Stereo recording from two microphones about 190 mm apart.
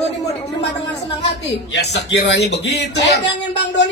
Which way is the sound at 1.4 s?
65° left (ahead or behind).